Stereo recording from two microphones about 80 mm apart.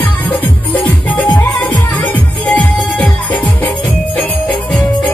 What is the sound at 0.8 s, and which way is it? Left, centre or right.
Music, left.